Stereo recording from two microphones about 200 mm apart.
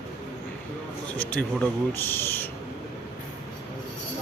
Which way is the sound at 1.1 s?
10° left (ahead or behind).